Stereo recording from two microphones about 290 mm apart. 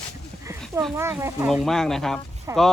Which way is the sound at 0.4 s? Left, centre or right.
Centre.